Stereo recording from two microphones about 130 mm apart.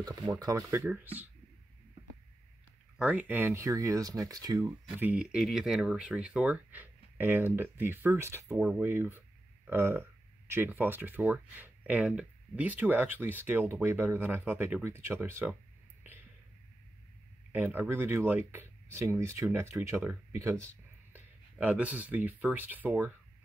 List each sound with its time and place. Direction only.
0.0 s speech: 30° right (ahead or behind); by 1.3 s 15° right (ahead or behind)
3.0 s speech: 10° right (ahead or behind); by 4.6 s 30° right (ahead or behind)
4.9 s speech: 10° right (ahead or behind)
17.5 s speech: 15° right (ahead or behind)